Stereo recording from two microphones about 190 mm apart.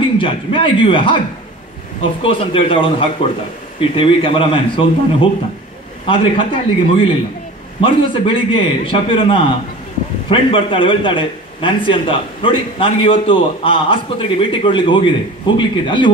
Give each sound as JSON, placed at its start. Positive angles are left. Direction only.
{"t": 0.2, "sound": "a man's voice", "side_deg": 25}
{"t": 2.2, "sound": "a man's voice", "side_deg": 30}